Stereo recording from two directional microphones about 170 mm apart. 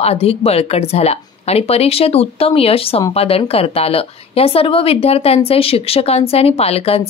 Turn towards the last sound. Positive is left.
turn(degrees=35)  # may be behind; listen again after turning